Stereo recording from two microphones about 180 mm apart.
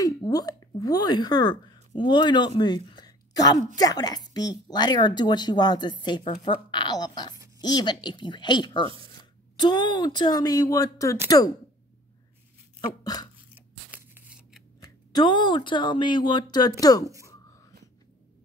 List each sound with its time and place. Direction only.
0.0 s a woman's voice: 20° left (ahead or behind)
13.0 s dog: 20° left (ahead or behind)
13.6 s scissors: 10° right (ahead or behind)
14.8 s speech: 25° left (ahead or behind)
17.0 s speech: 15° right (ahead or behind)
17.3 s a sound: 20° left (ahead or behind)